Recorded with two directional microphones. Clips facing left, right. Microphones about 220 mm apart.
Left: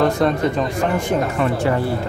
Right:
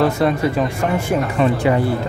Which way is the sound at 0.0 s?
5° right (ahead or behind).